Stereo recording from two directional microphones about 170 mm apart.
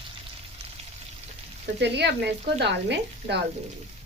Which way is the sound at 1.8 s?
85° right.